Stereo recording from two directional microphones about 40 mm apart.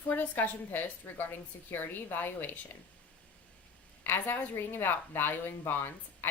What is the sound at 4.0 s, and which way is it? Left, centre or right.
A woman's voice, left.